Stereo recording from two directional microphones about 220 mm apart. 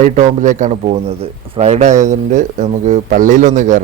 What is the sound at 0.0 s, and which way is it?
Speech, 35° right (ahead or behind).